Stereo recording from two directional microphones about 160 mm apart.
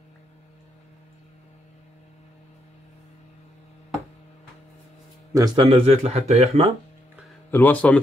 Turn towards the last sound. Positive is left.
turn(degrees=10)  # may be behind; listen again after turning